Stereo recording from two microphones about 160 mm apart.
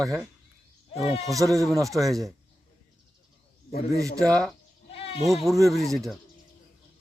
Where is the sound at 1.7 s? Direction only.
20° right (ahead or behind).